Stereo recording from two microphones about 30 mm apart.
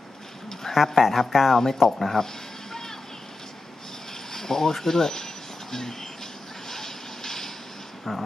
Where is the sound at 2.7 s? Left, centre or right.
Centre.